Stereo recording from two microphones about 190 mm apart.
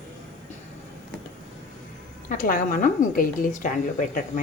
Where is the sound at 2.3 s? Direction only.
45° left (ahead or behind).